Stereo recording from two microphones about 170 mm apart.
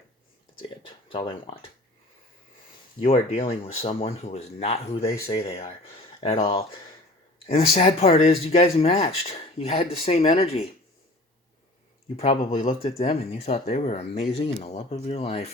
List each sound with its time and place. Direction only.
1.1 s speech: 35° left (ahead or behind)
3.0 s speech: 40° left (ahead or behind)
6.1 s speech: 35° left (ahead or behind)
7.4 s speech: 35° left (ahead or behind)
12.5 s speech: 40° left (ahead or behind)